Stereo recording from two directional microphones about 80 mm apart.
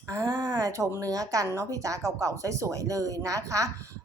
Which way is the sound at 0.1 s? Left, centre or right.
Right.